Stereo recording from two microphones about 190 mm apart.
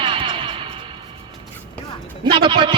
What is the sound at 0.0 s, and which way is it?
Music, 25° right (ahead or behind).